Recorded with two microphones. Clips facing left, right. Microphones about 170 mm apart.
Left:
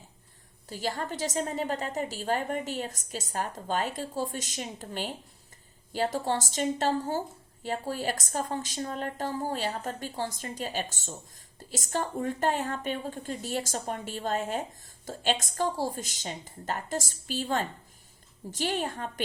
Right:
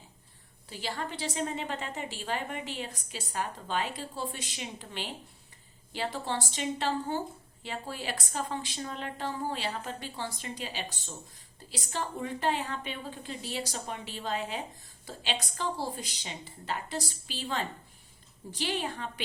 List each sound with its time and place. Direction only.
0.7 s a woman's voice: 45° left (ahead or behind)